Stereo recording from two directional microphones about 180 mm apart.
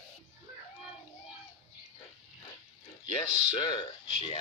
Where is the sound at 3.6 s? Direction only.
25° left (ahead or behind).